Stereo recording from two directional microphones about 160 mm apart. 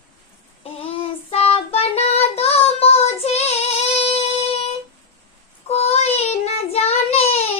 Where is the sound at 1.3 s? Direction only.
40° left (ahead or behind).